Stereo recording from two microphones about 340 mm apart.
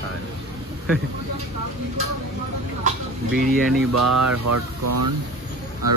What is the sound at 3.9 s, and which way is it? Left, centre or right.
Speech, right.